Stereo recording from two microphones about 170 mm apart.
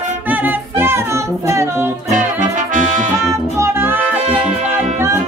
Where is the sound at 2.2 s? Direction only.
50° right (ahead or behind).